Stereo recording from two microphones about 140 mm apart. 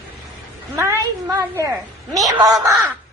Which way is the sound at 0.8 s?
20° right (ahead or behind).